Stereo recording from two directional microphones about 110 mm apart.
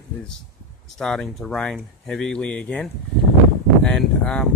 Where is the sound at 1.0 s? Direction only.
5° left (ahead or behind).